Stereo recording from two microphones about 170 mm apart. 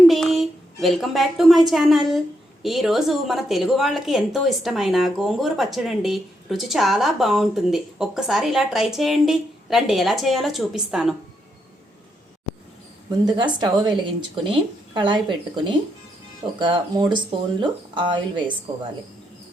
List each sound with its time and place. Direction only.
0.1 s a woman's voice: centre (ahead or behind)
13.2 s speech: 25° right (ahead or behind)